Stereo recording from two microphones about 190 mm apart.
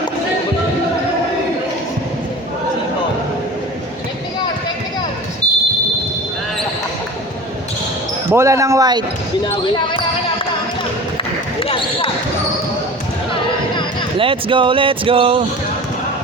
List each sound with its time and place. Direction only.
5.4 s a sound: 20° right (ahead or behind)
8.3 s speech: 15° right (ahead or behind)
11.6 s speech: 30° left (ahead or behind)
14.2 s speech: 25° right (ahead or behind)